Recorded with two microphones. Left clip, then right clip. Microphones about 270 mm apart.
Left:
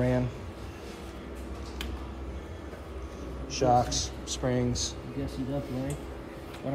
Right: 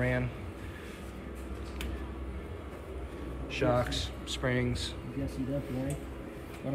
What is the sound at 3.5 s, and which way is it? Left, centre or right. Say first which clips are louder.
Speech: left 5 dB; centre.